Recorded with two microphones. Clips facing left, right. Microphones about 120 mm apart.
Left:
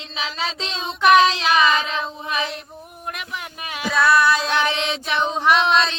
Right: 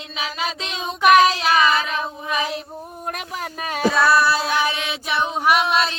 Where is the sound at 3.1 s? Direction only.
40° right (ahead or behind).